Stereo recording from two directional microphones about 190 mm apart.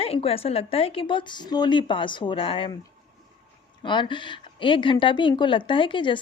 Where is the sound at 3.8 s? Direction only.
25° left (ahead or behind).